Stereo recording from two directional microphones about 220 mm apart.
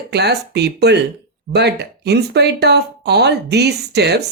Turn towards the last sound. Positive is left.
turn(degrees=-50)  # may be behind; listen again after turning